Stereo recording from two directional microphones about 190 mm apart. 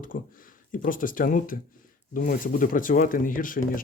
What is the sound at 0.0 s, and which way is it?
Speech, 45° left (ahead or behind).